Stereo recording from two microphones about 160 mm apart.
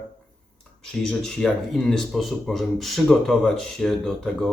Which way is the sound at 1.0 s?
5° left (ahead or behind).